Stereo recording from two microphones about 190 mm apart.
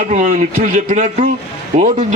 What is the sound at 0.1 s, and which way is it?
A man's voice, 40° right (ahead or behind).